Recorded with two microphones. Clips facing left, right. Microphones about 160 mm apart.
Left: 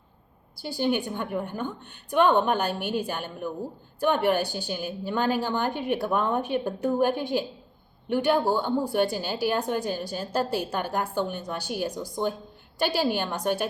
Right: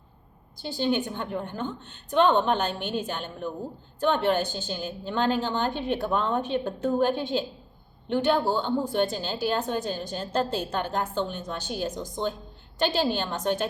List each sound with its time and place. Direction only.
0.5 s a woman's voice: 10° left (ahead or behind)